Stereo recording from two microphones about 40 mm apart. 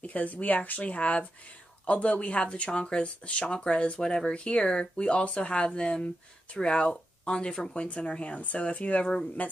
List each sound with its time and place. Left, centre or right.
0.0 s speech: left